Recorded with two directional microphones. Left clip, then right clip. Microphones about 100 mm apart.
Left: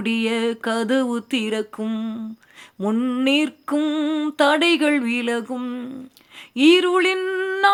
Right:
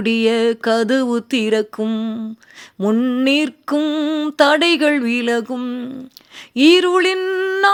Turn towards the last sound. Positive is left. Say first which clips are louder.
# right 4 dB
turn(degrees=-40)  # may be behind; listen again after turning